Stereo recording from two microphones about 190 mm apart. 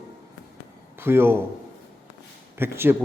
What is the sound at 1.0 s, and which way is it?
Speech, 10° right (ahead or behind).